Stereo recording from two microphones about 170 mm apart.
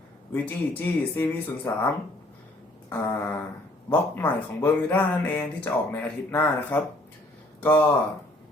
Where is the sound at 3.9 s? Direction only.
10° left (ahead or behind).